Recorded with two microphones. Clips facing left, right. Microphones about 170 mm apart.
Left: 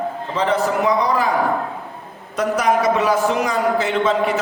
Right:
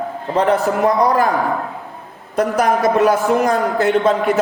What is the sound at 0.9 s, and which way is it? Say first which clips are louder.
Speech: right 6 dB; 45° right (ahead or behind).